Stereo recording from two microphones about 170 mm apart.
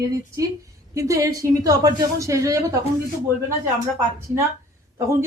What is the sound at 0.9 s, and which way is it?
A woman's voice, 20° right (ahead or behind).